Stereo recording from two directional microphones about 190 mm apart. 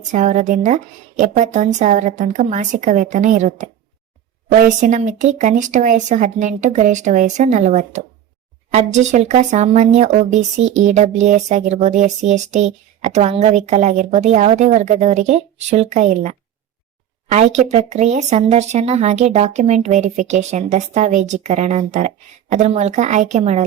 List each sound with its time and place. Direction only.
0.1 s speech: 40° right (ahead or behind)